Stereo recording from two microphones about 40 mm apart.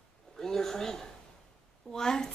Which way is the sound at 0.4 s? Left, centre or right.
Centre.